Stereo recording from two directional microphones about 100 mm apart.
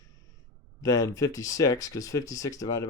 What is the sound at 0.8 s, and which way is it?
Speech, 35° left (ahead or behind).